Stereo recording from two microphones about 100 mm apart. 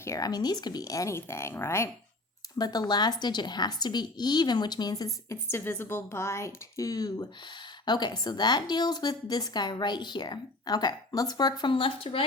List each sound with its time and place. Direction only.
0.0 s speech: 30° left (ahead or behind)
0.3 s speech: 40° left (ahead or behind); by 1.9 s 25° left (ahead or behind)
2.6 s speech: 40° left (ahead or behind); by 12.2 s 65° left (ahead or behind)